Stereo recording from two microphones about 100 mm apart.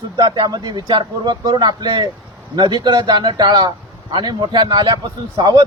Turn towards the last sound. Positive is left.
turn(degrees=-45)  # may be behind; listen again after turning